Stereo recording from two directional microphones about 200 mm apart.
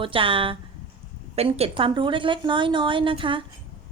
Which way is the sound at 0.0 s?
25° right (ahead or behind).